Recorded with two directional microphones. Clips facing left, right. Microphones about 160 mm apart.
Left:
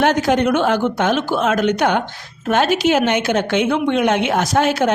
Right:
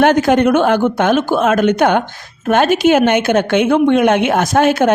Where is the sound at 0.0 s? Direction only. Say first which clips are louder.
Right 5 dB; 55° right (ahead or behind).